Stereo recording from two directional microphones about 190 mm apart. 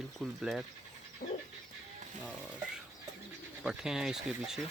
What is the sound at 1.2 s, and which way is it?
Dog, 55° left (ahead or behind).